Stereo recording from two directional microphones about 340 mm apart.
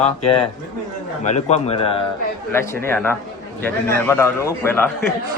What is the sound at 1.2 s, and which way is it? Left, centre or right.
Speech, centre.